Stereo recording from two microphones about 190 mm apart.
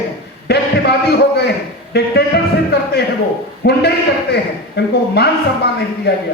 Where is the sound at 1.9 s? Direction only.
60° left (ahead or behind).